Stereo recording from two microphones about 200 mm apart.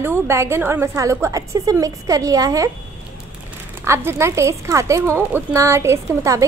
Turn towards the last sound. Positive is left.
turn(degrees=-15)  # may be behind; listen again after turning